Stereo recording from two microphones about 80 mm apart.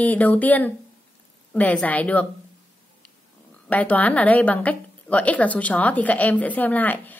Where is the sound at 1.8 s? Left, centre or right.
Centre.